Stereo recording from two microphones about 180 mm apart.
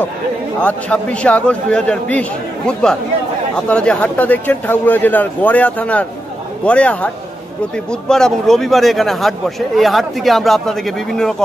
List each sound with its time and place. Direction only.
0.6 s speech: 5° left (ahead or behind)